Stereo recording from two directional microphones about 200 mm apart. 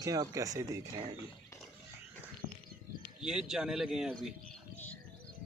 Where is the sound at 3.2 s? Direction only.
5° right (ahead or behind).